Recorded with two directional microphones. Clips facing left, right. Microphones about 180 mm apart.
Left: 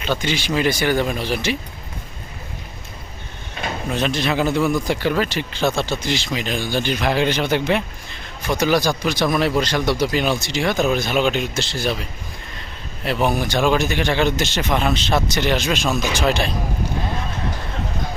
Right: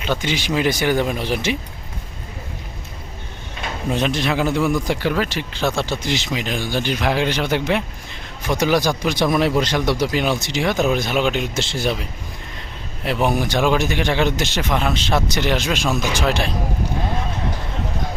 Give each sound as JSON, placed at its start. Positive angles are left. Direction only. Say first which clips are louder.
{"t": 0.2, "sound": "speech", "louder": "even", "side_deg": -15}
{"t": 4.0, "sound": "speech", "louder": "left 1 dB", "side_deg": -10}
{"t": 10.6, "sound": "speech", "louder": "even", "side_deg": -5}
{"t": 11.5, "sound": "speech", "louder": "right 1 dB", "side_deg": -25}
{"t": 13.1, "sound": "speech", "louder": "even", "side_deg": -15}
{"t": 14.6, "sound": "speech", "louder": "left 1 dB", "side_deg": 0}